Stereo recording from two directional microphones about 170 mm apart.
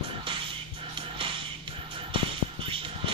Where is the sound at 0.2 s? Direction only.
30° right (ahead or behind).